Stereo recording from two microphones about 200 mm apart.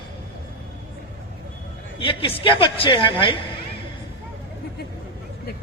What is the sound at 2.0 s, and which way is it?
A woman's voice, 25° left (ahead or behind).